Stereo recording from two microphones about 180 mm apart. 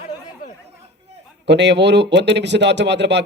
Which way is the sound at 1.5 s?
75° right (ahead or behind).